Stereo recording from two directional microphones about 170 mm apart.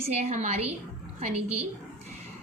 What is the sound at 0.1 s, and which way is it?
Speech, 40° right (ahead or behind).